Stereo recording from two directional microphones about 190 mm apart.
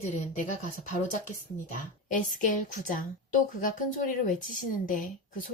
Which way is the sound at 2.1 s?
45° left (ahead or behind).